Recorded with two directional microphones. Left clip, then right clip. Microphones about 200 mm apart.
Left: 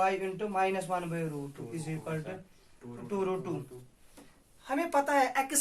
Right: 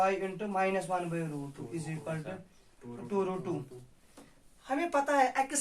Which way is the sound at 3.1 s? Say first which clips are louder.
Even; 25° left (ahead or behind).